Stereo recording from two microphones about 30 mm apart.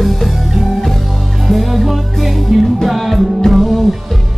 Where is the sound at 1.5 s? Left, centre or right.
Centre.